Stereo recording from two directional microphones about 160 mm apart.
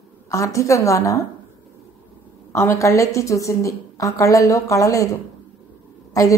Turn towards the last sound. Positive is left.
turn(degrees=20)  # may be behind; listen again after turning